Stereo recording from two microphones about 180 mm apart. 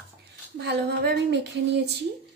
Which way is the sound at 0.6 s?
65° right (ahead or behind).